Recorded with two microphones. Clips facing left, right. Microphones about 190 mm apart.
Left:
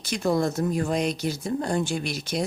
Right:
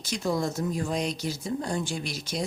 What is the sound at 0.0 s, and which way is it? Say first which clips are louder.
Speech: left 4 dB; 60° left (ahead or behind).